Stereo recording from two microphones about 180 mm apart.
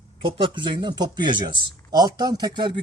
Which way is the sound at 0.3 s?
25° right (ahead or behind).